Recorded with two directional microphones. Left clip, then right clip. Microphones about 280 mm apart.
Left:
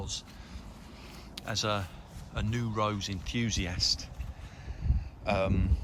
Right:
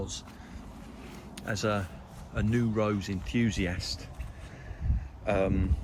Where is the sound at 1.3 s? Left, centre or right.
Centre.